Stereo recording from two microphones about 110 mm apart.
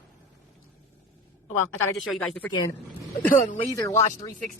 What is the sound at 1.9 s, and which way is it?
Speech, centre (ahead or behind).